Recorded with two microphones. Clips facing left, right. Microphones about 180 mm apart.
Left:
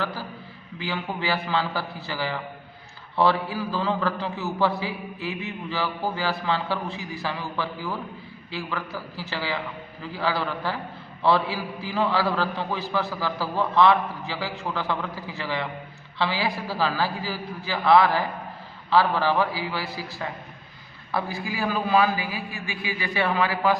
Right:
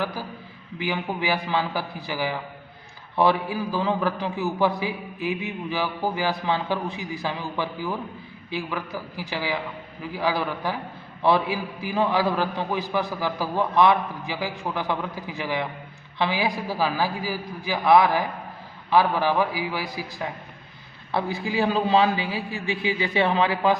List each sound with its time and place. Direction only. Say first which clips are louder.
0.0 s a man's voice: right 1 dB; 15° right (ahead or behind)